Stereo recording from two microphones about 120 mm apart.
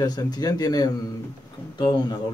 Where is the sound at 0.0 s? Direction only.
35° left (ahead or behind).